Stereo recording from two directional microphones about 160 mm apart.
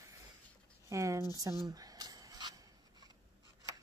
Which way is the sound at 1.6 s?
25° right (ahead or behind).